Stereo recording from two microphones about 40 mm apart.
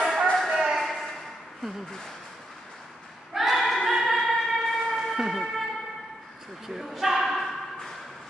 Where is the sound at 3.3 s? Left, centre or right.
Centre.